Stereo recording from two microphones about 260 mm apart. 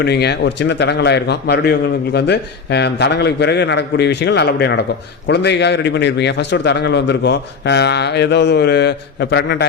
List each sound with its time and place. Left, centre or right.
0.0 s a man's voice: left